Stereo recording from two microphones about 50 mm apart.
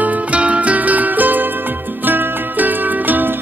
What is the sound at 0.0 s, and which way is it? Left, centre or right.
Music, right.